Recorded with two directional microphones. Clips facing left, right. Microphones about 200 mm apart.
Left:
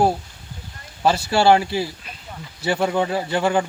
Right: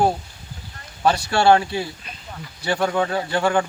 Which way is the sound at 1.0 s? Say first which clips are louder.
Left 1 dB; 25° left (ahead or behind).